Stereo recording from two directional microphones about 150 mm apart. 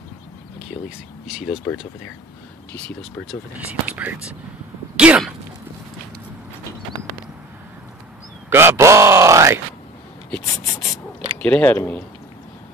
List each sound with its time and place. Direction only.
1.2 s speech: 5° right (ahead or behind)
3.5 s speech: 10° right (ahead or behind)
4.9 s sneeze: 5° right (ahead or behind)
8.5 s speech: 15° right (ahead or behind)
11.4 s speech: 10° left (ahead or behind)